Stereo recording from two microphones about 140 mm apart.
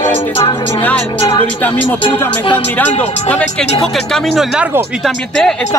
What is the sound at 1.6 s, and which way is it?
Speech, 10° left (ahead or behind).